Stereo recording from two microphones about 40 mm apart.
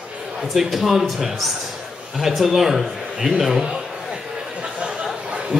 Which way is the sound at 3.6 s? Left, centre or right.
Centre.